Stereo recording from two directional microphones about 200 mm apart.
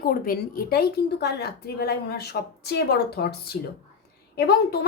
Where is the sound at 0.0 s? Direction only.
45° left (ahead or behind).